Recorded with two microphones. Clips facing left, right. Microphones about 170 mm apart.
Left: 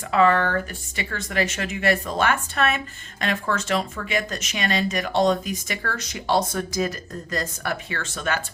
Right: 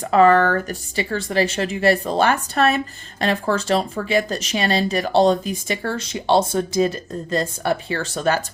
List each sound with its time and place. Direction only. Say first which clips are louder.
0.0 s speech: right 5 dB; 40° right (ahead or behind)